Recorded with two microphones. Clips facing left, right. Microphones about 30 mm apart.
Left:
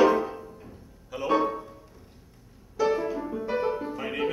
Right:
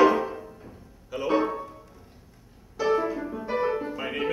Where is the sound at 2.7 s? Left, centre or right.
Centre.